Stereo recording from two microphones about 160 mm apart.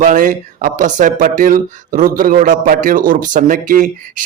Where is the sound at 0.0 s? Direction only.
55° right (ahead or behind).